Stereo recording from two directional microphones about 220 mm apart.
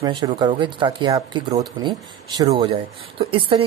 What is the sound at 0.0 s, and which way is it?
A woman's voice, 20° right (ahead or behind).